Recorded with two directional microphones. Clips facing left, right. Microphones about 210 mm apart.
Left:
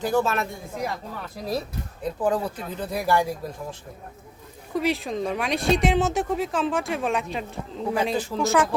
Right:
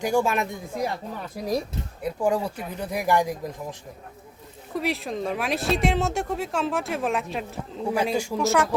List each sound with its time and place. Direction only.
0.0 s speech: 10° right (ahead or behind)
4.7 s speech: centre (ahead or behind)
8.4 s speech: centre (ahead or behind)